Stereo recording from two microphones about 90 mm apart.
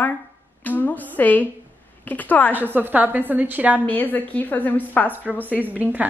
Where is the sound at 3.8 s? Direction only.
20° left (ahead or behind).